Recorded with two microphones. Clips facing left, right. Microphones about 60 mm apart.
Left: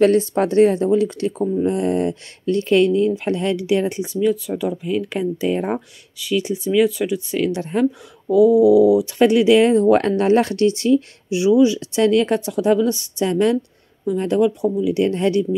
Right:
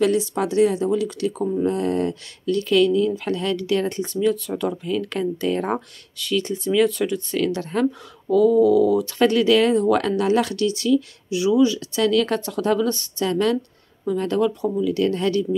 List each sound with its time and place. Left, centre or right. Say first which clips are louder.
0.0 s speech: left 5 dB; left; by 9.8 s centre
9.8 s speech: left 4 dB; left